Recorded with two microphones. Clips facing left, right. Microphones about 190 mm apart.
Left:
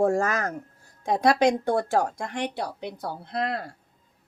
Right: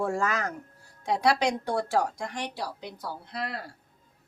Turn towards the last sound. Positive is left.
turn(degrees=55)  # may be behind; listen again after turning